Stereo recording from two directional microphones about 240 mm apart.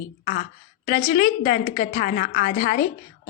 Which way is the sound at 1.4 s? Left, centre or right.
Left.